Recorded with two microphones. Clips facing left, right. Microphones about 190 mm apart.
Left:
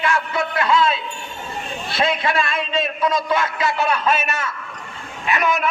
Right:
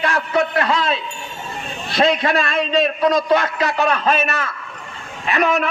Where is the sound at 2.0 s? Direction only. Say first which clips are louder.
Right 4 dB; 40° right (ahead or behind).